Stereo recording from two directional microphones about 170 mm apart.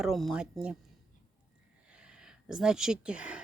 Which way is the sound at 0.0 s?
Centre (ahead or behind).